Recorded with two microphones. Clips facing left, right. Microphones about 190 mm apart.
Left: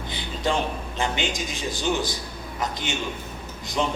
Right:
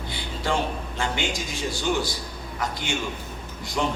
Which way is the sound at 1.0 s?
20° left (ahead or behind).